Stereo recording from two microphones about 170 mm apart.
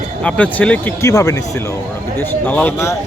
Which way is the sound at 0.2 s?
10° left (ahead or behind).